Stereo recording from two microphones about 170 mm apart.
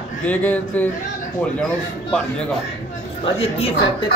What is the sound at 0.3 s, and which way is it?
Speech, 10° left (ahead or behind).